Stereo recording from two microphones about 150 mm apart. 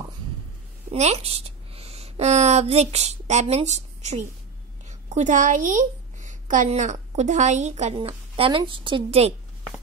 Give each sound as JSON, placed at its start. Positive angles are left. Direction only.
{"t": 0.9, "sound": "a woman's voice", "side_deg": -45}